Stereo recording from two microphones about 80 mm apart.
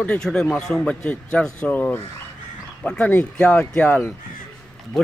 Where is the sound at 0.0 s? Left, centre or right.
Centre.